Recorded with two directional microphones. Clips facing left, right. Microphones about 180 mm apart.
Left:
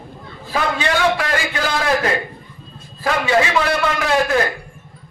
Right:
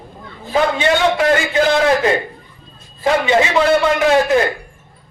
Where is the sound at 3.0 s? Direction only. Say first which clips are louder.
Right 3 dB; 20° right (ahead or behind).